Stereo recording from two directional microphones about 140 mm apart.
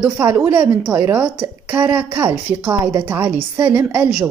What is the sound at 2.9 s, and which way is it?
Speech, 25° right (ahead or behind).